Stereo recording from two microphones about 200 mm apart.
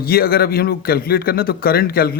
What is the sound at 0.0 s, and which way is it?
A man's voice, 50° left (ahead or behind).